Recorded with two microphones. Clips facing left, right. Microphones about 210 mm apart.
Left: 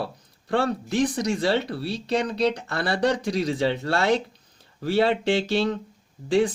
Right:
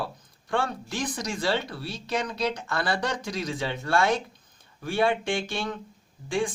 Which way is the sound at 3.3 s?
70° left (ahead or behind).